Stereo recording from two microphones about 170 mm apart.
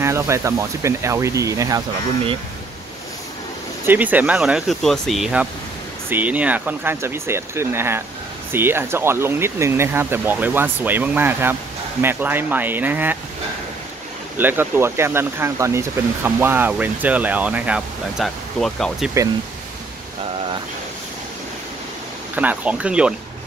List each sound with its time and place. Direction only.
0.0 s speech: 15° right (ahead or behind)
3.8 s speech: 10° right (ahead or behind)
14.4 s speech: 10° right (ahead or behind)
22.3 s speech: 10° right (ahead or behind)